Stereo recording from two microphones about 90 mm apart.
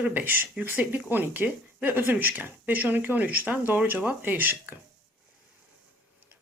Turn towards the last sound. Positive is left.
turn(degrees=-20)  # may be behind; listen again after turning